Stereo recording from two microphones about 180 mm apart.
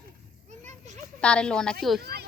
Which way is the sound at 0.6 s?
40° right (ahead or behind).